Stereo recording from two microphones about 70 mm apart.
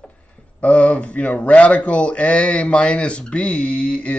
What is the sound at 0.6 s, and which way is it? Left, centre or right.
A man's voice, centre.